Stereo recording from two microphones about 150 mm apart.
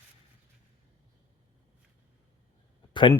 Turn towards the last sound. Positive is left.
turn(degrees=30)  # may be behind; listen again after turning